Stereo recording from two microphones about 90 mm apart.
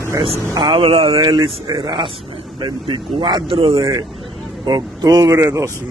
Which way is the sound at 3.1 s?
70° right (ahead or behind).